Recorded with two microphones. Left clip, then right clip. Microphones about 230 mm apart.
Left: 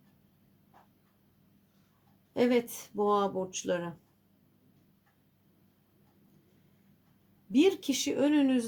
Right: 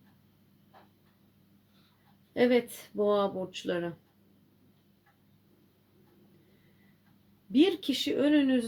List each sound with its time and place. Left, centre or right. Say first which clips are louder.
2.3 s speech: right 2 dB; left
7.5 s speech: even; left